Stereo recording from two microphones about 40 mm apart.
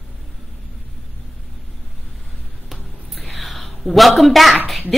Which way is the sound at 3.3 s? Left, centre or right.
Centre.